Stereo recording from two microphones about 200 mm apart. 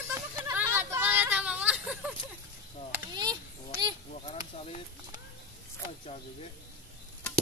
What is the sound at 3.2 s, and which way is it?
Children playing, 20° right (ahead or behind).